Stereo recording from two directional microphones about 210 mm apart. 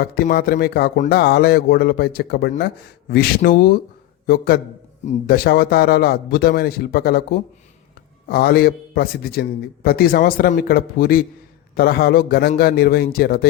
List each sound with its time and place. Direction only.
0.0 s speech: 45° left (ahead or behind)